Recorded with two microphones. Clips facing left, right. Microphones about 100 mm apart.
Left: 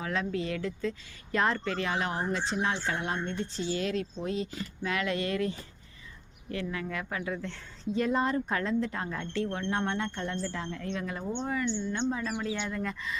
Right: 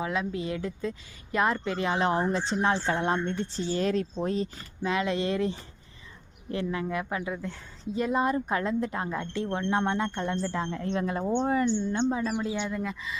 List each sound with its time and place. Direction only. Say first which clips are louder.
0.0 s speech: right 2 dB; 15° right (ahead or behind); by 4.4 s 45° right (ahead or behind)
4.8 s a woman's voice: right 4 dB; 25° right (ahead or behind)
12.3 s speech: right 3 dB; 10° right (ahead or behind)